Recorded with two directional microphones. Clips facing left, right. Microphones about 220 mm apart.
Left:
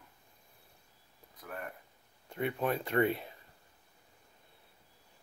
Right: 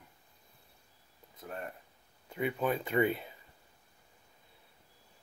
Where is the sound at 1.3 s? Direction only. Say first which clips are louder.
Right 1 dB; 25° right (ahead or behind).